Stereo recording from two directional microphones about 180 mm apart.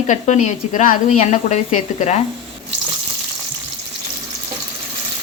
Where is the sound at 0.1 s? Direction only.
40° left (ahead or behind).